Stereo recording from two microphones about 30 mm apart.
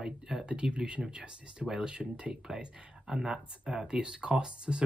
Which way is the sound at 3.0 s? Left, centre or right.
Right.